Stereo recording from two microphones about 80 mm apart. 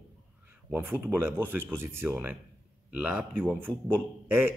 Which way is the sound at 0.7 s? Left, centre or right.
Right.